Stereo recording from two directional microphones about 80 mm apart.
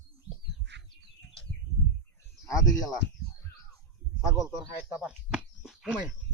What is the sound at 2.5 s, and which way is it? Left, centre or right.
Speech, left.